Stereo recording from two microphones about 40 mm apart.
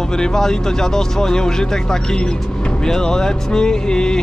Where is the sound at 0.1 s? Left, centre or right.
Centre.